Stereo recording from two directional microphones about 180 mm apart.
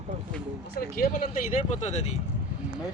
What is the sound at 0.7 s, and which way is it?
Speech, 55° left (ahead or behind).